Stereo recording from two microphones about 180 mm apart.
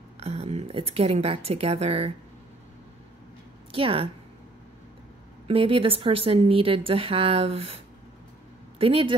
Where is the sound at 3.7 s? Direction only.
30° right (ahead or behind).